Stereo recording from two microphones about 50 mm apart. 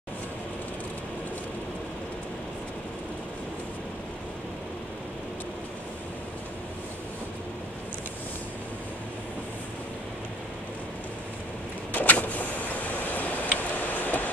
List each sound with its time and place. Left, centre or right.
11.9 s vehicle: left